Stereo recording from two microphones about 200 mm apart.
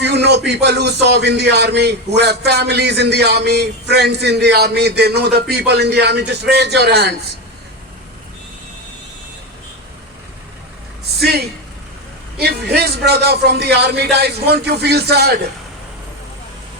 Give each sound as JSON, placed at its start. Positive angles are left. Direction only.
{"t": 0.0, "sound": "speech", "side_deg": -60}
{"t": 11.2, "sound": "speech", "side_deg": -55}